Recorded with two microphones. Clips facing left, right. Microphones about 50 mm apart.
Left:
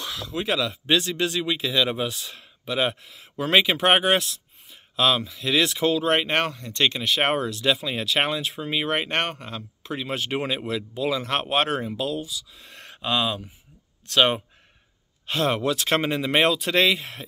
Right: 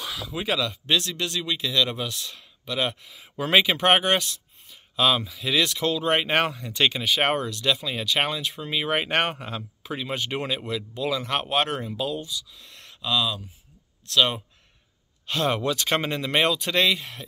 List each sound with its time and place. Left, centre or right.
0.0 s speech: centre
3.1 s speech: centre
5.7 s speech: centre
6.0 s speech: centre
7.2 s speech: centre
8.8 s speech: centre
9.9 s speech: centre
12.4 s speech: left
15.3 s speech: centre